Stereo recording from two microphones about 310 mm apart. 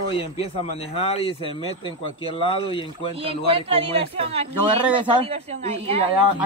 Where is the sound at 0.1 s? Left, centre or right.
Centre.